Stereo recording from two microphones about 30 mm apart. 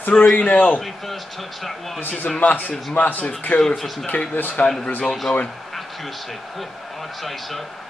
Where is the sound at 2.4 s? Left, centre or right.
Left.